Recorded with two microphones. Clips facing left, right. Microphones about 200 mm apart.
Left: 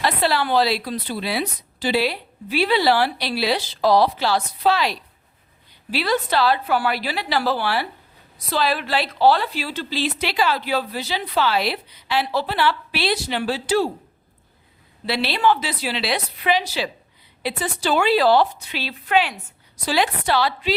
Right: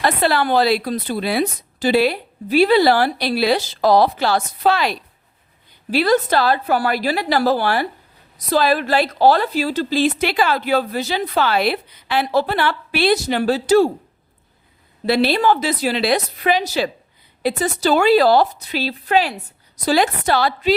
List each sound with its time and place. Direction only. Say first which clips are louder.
0.0 s a woman's voice: right 3 dB; 50° right (ahead or behind)
15.0 s a woman's voice: right 4 dB; 45° right (ahead or behind)